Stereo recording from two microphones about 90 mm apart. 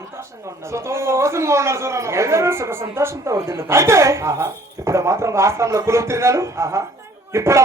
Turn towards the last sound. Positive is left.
turn(degrees=-35)  # may be behind; listen again after turning